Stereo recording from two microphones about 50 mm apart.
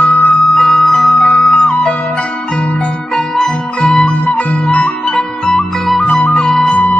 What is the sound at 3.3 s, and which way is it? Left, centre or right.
Music, centre.